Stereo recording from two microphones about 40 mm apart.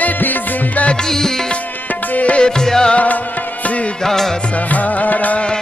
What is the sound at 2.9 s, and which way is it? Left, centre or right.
Music, left.